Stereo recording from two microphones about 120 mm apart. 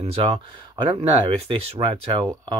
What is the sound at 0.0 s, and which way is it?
Speech, 55° right (ahead or behind).